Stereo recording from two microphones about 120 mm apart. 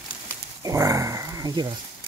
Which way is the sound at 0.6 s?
30° right (ahead or behind).